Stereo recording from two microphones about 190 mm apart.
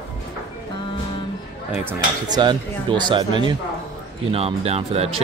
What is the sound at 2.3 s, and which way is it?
Speech, 25° right (ahead or behind).